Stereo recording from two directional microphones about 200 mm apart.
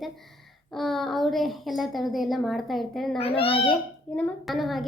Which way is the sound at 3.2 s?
30° left (ahead or behind).